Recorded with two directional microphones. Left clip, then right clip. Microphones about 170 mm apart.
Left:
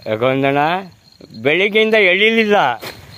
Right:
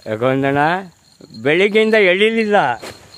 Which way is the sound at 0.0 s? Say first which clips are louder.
Left 1 dB; 5° right (ahead or behind).